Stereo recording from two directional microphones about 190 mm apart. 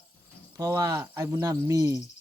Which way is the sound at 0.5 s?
15° right (ahead or behind).